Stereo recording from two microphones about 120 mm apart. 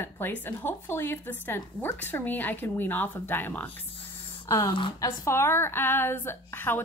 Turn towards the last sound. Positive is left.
turn(degrees=20)  # may be behind; listen again after turning